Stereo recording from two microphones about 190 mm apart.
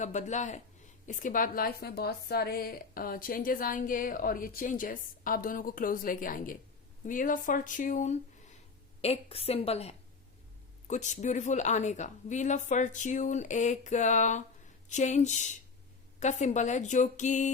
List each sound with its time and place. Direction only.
0.0 s a woman's voice: 40° left (ahead or behind)